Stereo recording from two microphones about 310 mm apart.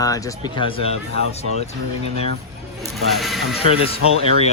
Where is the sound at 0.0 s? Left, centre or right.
Centre.